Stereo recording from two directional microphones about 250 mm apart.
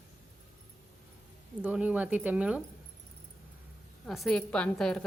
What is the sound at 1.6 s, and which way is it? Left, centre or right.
A woman's voice, centre.